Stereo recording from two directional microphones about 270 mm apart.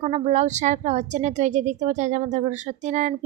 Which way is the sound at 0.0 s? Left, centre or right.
Right.